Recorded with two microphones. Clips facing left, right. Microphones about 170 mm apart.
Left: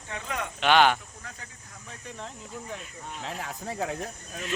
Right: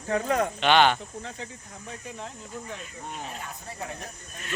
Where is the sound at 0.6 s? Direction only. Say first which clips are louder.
Left 1 dB; 5° left (ahead or behind).